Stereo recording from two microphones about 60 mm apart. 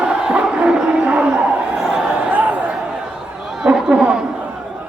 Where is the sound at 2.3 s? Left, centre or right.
Right.